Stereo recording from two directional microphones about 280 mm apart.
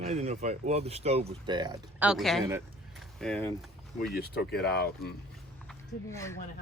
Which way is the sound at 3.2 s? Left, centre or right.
Centre.